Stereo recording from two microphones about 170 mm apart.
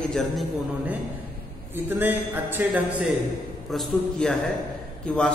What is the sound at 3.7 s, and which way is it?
A man's voice, centre (ahead or behind).